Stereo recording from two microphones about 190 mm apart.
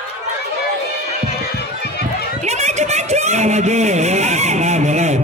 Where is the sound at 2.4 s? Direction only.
35° right (ahead or behind).